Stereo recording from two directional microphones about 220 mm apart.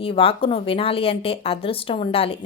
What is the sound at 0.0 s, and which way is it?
A woman's voice, 25° left (ahead or behind).